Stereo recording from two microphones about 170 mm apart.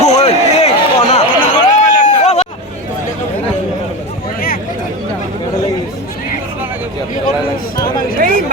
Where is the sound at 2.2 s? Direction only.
40° left (ahead or behind).